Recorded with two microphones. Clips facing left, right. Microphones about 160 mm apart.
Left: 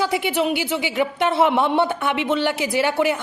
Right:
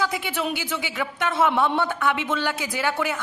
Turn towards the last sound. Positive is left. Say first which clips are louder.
# left 6 dB
turn(degrees=20)  # may be behind; listen again after turning